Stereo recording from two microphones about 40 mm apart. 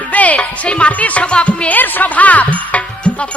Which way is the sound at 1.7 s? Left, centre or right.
Left.